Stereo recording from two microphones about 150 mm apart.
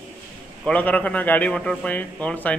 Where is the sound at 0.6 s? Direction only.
10° left (ahead or behind).